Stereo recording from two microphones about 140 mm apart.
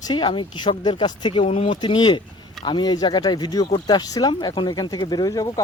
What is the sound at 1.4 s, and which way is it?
Speech, 45° left (ahead or behind).